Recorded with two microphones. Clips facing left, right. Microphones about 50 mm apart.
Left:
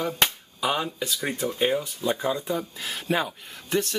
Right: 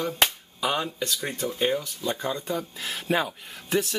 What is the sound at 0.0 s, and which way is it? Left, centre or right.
Speech, centre.